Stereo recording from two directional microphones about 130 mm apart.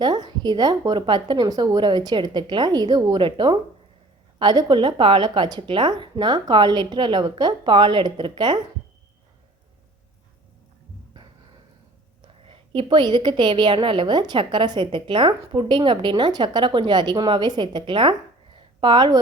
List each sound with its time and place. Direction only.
0.0 s a woman's voice: 30° right (ahead or behind)
12.5 s a woman's voice: 40° right (ahead or behind)